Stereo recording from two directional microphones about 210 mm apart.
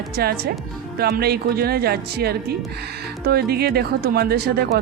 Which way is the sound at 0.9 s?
50° right (ahead or behind).